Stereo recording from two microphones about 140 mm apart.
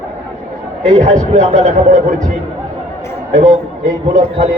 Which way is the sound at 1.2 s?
55° right (ahead or behind).